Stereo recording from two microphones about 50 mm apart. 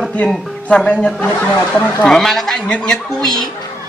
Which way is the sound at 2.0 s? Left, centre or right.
Centre.